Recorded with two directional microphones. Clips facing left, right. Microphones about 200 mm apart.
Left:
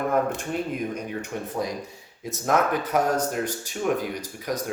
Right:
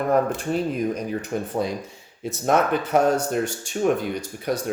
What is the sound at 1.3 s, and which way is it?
Speech, 35° right (ahead or behind).